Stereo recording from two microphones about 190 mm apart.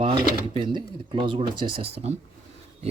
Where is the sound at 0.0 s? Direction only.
25° right (ahead or behind).